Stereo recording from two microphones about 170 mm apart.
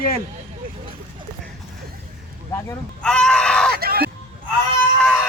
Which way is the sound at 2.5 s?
15° left (ahead or behind).